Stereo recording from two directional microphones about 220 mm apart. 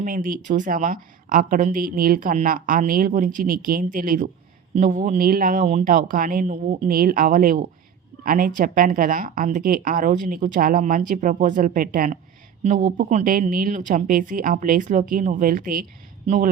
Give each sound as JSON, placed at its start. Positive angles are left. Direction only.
{"t": 0.0, "sound": "a woman's voice", "side_deg": -40}